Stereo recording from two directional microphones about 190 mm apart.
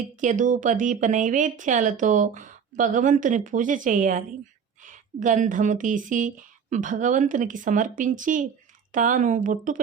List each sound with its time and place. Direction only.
0.2 s a woman's voice: 40° right (ahead or behind)